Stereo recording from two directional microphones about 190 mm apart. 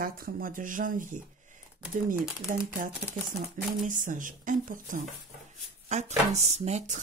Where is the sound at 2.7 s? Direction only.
45° right (ahead or behind).